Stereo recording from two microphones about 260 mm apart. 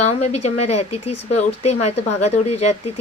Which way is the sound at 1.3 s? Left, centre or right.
Left.